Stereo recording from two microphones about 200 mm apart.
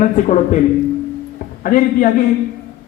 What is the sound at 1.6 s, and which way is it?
Speech, 45° left (ahead or behind).